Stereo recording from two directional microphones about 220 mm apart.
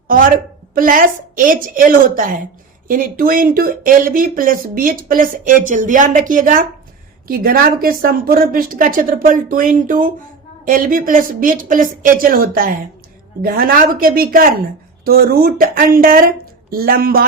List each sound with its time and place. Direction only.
0.1 s a woman's voice: 40° right (ahead or behind)